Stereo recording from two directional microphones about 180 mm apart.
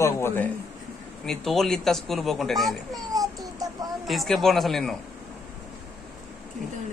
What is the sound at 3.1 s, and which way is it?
Child singing, 20° right (ahead or behind).